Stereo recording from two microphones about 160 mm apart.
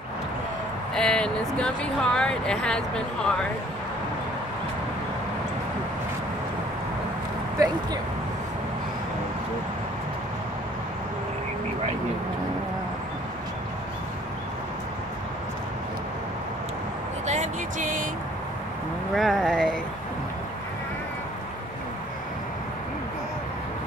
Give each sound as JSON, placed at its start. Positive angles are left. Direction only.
{"t": 0.9, "sound": "speech", "side_deg": 5}
{"t": 7.5, "sound": "speech", "side_deg": -25}
{"t": 17.3, "sound": "music", "side_deg": -50}
{"t": 19.1, "sound": "vehicle", "side_deg": 0}